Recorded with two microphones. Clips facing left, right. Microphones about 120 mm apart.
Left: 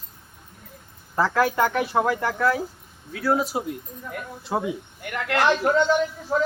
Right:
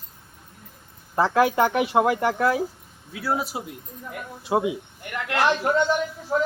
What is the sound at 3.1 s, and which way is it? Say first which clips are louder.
A man's voice: left 4 dB; 10° right (ahead or behind).